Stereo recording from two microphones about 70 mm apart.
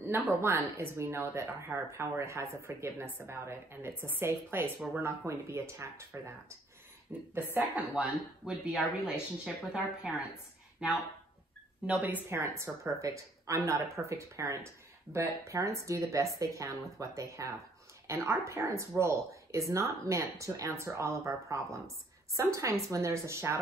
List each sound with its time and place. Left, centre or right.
0.0 s a woman's voice: right
7.3 s speech: right
12.3 s a woman's voice: right
20.7 s a woman's voice: right